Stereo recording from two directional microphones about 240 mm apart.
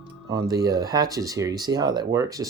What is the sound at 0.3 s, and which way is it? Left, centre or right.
Speech, centre.